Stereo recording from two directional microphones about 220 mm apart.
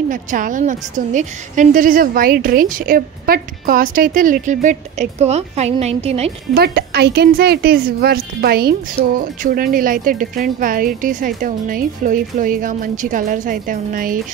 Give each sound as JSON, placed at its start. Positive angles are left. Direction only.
{"t": 0.1, "sound": "a woman's voice", "side_deg": -35}
{"t": 6.5, "sound": "a woman's voice", "side_deg": -45}